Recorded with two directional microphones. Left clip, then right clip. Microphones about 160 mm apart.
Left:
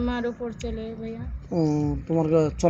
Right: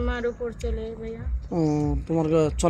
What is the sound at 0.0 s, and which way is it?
A woman's voice, 20° right (ahead or behind).